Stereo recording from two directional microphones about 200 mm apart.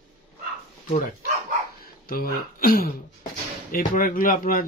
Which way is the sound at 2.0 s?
45° left (ahead or behind).